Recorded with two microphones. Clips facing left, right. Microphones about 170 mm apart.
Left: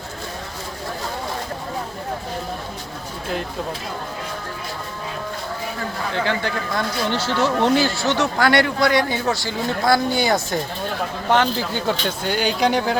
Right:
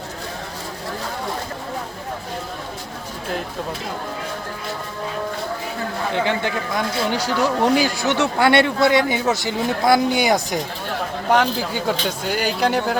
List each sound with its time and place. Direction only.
6.1 s speech: 20° right (ahead or behind)
11.3 s speech: 5° right (ahead or behind)